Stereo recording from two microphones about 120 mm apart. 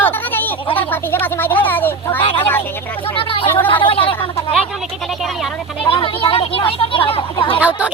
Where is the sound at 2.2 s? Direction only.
45° left (ahead or behind).